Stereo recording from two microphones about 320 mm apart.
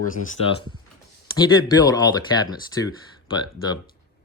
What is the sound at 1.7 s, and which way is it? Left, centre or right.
Speech, centre.